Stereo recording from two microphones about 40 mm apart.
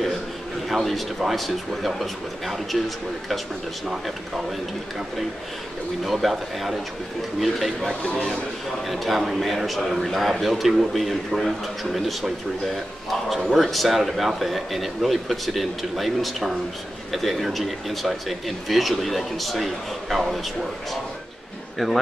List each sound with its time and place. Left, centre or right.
0.7 s speech: centre
6.0 s speech: centre
8.0 s speech: left
8.8 s speech: centre
21.7 s speech: centre